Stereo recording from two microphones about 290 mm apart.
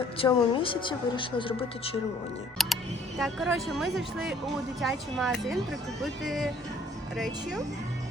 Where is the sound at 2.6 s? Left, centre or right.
Centre.